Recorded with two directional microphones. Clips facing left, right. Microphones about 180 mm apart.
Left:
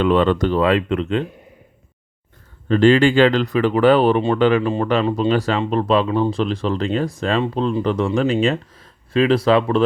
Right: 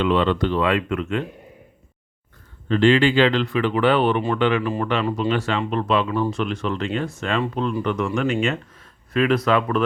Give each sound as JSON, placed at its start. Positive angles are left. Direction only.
{"t": 0.0, "sound": "speech", "side_deg": 45}
{"t": 2.6, "sound": "speech", "side_deg": 40}
{"t": 5.3, "sound": "speech", "side_deg": 40}